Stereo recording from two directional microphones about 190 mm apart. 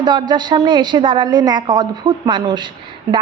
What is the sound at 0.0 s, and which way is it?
A woman's voice, 25° right (ahead or behind).